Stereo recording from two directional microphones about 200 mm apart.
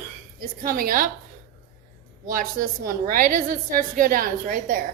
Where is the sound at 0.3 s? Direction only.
45° right (ahead or behind).